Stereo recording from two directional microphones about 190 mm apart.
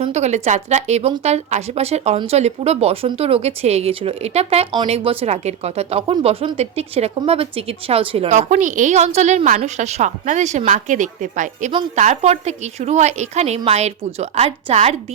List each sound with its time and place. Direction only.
0.0 s speech: 35° right (ahead or behind)